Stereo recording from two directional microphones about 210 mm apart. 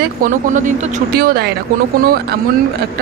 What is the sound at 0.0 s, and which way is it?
Speech, 35° right (ahead or behind).